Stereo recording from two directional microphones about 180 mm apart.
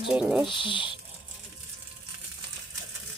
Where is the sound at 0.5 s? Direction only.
30° left (ahead or behind).